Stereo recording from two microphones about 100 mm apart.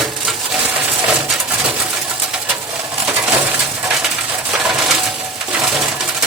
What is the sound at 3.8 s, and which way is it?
Coin, 5° right (ahead or behind).